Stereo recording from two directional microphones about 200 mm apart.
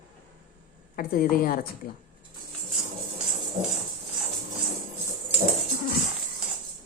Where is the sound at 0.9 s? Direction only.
45° left (ahead or behind).